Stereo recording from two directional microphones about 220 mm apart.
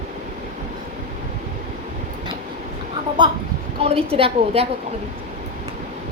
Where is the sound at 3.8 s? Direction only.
25° right (ahead or behind).